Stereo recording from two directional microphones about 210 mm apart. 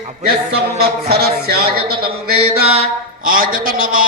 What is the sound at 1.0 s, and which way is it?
Male singing, 50° right (ahead or behind).